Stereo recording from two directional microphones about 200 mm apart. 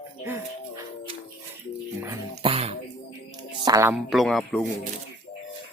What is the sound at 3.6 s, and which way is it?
Speech, 15° right (ahead or behind).